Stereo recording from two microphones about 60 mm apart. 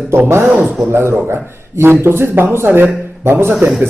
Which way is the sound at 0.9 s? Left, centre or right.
Right.